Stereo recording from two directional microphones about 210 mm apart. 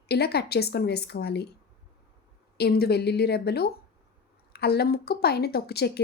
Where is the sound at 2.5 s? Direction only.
50° left (ahead or behind).